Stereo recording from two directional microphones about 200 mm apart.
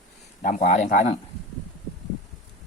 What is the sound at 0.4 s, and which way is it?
Speech, 35° left (ahead or behind).